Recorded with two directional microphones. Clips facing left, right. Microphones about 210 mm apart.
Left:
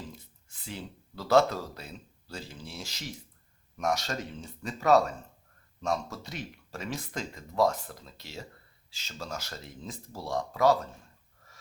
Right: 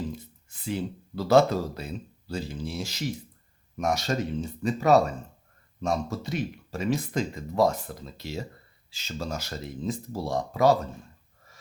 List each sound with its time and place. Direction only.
0.6 s speech: 10° right (ahead or behind)